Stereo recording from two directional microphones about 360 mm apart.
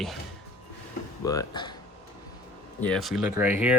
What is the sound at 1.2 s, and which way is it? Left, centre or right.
Speech, centre.